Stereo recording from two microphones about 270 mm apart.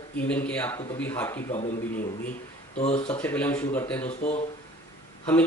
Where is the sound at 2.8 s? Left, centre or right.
Left.